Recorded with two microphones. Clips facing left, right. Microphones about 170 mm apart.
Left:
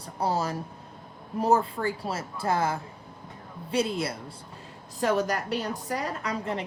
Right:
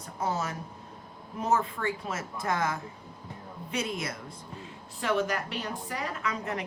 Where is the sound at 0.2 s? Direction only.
35° left (ahead or behind).